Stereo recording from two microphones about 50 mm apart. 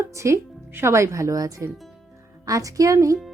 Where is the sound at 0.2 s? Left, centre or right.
Right.